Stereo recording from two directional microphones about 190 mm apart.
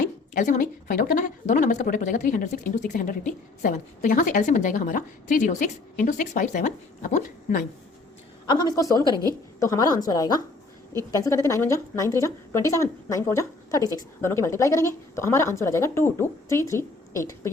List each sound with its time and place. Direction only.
0.3 s a woman's voice: 40° left (ahead or behind)
8.6 s a woman's voice: 15° left (ahead or behind)